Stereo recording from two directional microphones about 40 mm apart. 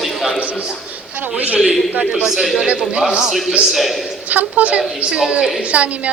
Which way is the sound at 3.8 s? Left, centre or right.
Centre.